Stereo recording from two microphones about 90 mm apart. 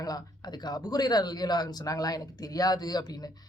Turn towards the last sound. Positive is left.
turn(degrees=45)  # may be behind; listen again after turning